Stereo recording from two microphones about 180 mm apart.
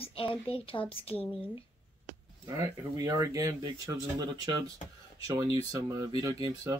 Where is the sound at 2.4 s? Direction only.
20° right (ahead or behind).